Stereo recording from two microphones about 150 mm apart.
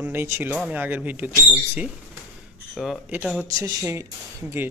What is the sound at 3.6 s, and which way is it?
Speech, 25° right (ahead or behind).